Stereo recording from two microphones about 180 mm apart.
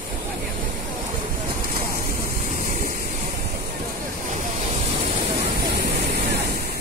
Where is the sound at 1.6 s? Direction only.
50° right (ahead or behind).